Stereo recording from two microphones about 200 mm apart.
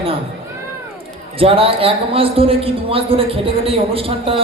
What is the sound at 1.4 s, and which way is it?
A man's voice, 25° right (ahead or behind).